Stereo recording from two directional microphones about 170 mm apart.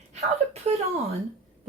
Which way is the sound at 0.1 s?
40° right (ahead or behind).